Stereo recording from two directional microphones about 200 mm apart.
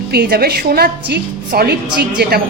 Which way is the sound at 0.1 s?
50° right (ahead or behind).